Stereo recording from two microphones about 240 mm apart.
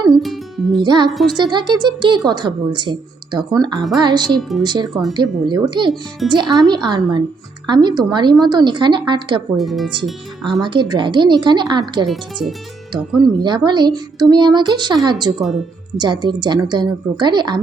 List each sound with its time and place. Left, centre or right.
0.1 s music: centre
0.8 s a woman's voice: centre
1.1 s speech: centre
1.4 s a woman's voice: centre
4.3 s speech: centre
4.6 s a woman's voice: centre
6.2 s speech: centre
6.7 s a woman's voice: centre
9.6 s speech: centre
10.6 s speech: centre
12.0 s speech: centre
13.4 s a woman's voice: centre
15.4 s speech: centre
16.0 s a woman's voice: centre